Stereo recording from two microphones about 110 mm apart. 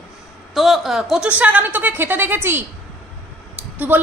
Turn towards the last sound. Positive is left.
turn(degrees=-15)  # may be behind; listen again after turning